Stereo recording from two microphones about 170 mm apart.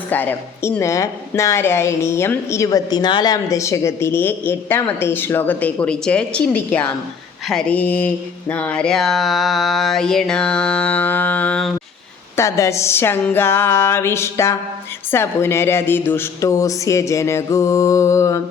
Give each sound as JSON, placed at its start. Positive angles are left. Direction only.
{"t": 0.1, "sound": "a woman's voice", "side_deg": 10}
{"t": 7.4, "sound": "a sound", "side_deg": 5}
{"t": 12.4, "sound": "a woman's voice", "side_deg": 20}